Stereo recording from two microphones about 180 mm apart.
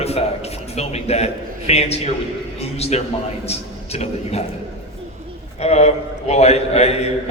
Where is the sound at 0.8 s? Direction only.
35° left (ahead or behind).